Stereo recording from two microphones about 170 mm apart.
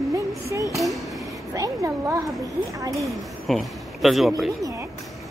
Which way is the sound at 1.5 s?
20° right (ahead or behind).